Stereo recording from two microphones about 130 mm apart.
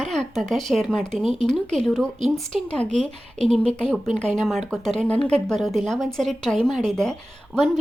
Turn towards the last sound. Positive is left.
turn(degrees=5)  # may be behind; listen again after turning